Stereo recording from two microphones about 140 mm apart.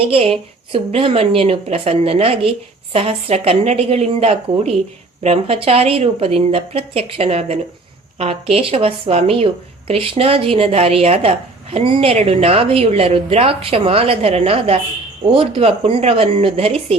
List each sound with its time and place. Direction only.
0.0 s a woman's voice: 40° right (ahead or behind)